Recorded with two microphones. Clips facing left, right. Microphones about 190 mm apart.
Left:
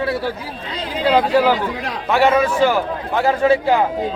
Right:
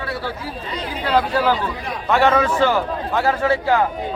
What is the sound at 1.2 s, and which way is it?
Speech, 15° left (ahead or behind).